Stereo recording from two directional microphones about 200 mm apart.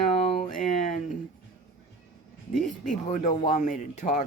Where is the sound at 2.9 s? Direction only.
40° left (ahead or behind).